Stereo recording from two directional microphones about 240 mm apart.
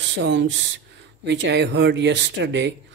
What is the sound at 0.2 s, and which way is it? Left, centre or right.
Speech, right.